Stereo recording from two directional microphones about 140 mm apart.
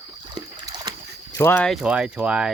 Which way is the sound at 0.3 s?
30° right (ahead or behind).